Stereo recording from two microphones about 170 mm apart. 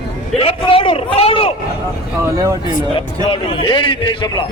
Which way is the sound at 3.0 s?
30° left (ahead or behind).